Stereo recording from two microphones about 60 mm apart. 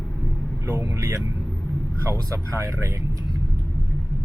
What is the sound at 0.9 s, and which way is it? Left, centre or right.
Speech, right.